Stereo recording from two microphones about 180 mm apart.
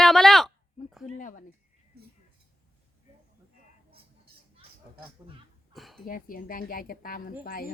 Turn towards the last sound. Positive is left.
turn(degrees=55)  # may be behind; listen again after turning